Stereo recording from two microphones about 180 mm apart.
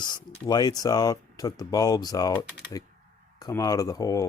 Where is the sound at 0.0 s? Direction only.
25° left (ahead or behind).